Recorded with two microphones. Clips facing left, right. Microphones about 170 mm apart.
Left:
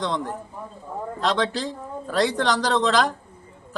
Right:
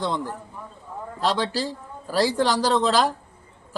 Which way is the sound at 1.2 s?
5° right (ahead or behind).